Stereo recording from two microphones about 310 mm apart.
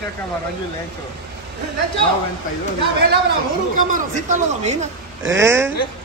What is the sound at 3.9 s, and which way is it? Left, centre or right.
A woman's voice, right.